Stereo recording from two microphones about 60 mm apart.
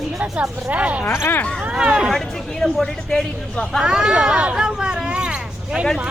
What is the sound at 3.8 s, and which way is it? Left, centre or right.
Speech, centre.